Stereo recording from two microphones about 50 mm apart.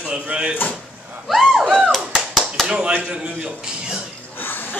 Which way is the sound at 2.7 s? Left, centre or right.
Right.